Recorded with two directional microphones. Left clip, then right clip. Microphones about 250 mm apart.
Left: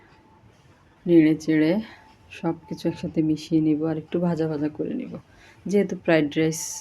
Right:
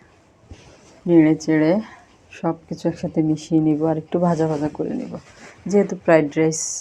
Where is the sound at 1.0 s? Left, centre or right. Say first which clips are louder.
Right 3 dB; centre.